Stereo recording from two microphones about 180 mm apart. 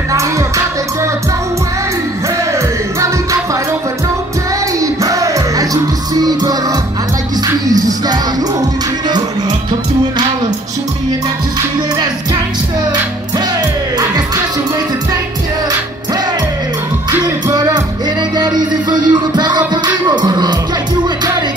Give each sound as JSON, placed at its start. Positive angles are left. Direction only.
{"t": 0.1, "sound": "music", "side_deg": -15}
{"t": 4.7, "sound": "music", "side_deg": -20}
{"t": 13.9, "sound": "music", "side_deg": -20}
{"t": 17.2, "sound": "music", "side_deg": -20}